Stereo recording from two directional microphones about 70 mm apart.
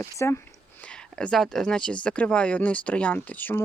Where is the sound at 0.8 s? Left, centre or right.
Centre.